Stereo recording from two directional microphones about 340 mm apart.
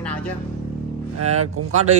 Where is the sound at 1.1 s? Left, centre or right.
Right.